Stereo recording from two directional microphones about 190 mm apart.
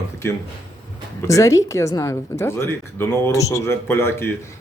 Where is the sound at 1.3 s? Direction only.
15° left (ahead or behind).